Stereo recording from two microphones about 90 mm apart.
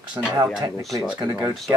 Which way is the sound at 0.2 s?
50° right (ahead or behind).